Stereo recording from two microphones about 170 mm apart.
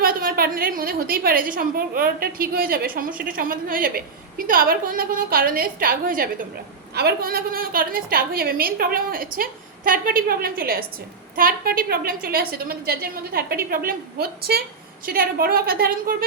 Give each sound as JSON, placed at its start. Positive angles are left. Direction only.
{"t": 0.0, "sound": "a woman's voice", "side_deg": -60}
{"t": 6.9, "sound": "a woman's voice", "side_deg": -70}